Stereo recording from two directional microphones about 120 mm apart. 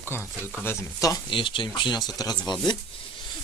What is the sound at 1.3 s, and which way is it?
Speech, 45° left (ahead or behind).